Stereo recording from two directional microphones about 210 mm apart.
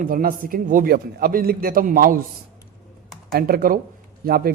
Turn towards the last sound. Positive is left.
turn(degrees=-45)  # may be behind; listen again after turning